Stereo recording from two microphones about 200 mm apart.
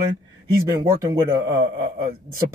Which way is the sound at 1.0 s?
15° right (ahead or behind).